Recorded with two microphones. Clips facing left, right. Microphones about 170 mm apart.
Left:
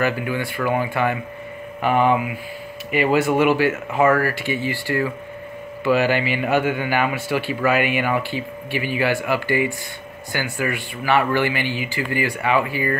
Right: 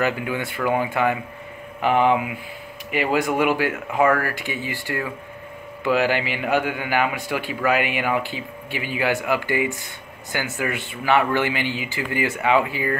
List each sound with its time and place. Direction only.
0.0 s a man's voice: 20° right (ahead or behind)